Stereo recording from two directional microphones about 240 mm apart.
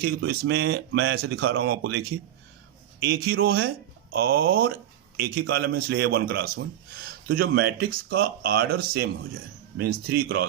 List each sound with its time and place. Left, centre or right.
0.0 s a man's voice: right